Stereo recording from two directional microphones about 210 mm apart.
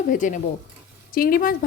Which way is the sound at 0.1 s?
35° left (ahead or behind).